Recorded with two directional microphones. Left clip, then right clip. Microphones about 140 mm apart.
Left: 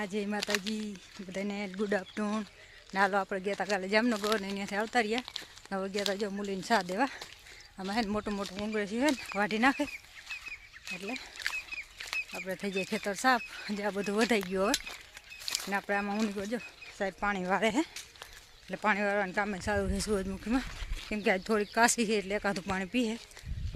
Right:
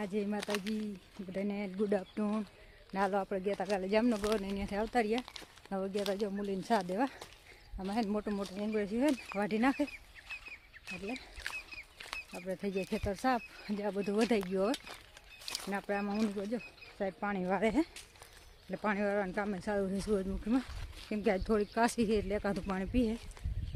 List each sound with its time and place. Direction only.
0.0 s speech: 10° left (ahead or behind)
8.6 s speech: 5° left (ahead or behind)
10.8 s speech: 45° left (ahead or behind)
11.9 s speech: 20° left (ahead or behind); by 23.2 s centre (ahead or behind)